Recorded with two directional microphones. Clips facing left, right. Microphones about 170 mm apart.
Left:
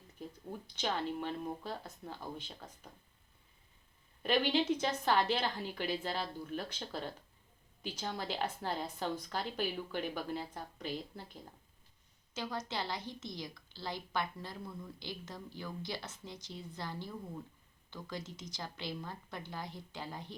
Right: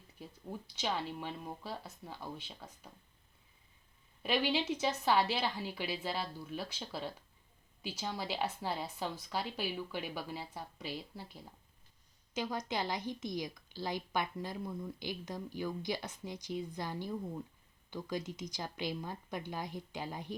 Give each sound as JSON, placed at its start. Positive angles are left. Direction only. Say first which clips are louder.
{"t": 0.7, "sound": "a woman's voice", "louder": "left 1 dB", "side_deg": -5}
{"t": 4.2, "sound": "a woman's voice", "louder": "left 2 dB", "side_deg": -5}
{"t": 12.3, "sound": "a woman's voice", "louder": "right 3 dB", "side_deg": -15}